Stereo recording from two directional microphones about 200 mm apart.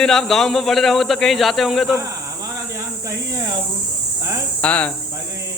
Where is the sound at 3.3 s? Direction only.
20° right (ahead or behind).